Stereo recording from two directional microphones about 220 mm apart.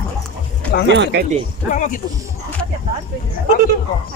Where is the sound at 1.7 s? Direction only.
35° left (ahead or behind).